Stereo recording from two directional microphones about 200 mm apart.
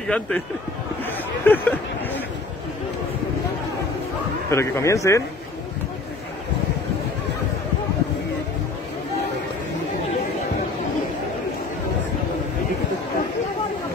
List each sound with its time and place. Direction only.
0.0 s speech: 5° left (ahead or behind)
1.4 s a sound: 10° left (ahead or behind)
4.5 s a man's voice: 15° left (ahead or behind)